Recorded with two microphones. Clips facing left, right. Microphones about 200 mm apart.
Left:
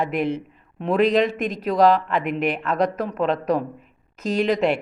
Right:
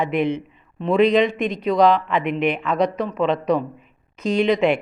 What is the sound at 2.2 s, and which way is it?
Speech, 45° left (ahead or behind).